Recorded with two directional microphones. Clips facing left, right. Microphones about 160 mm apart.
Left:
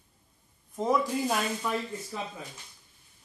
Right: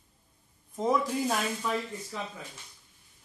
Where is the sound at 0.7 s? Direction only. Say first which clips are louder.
Left 1 dB; centre (ahead or behind).